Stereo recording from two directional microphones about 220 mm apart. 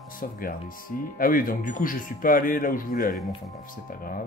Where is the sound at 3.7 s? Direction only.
40° left (ahead or behind).